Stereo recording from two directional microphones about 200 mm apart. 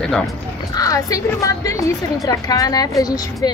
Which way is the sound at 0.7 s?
15° left (ahead or behind).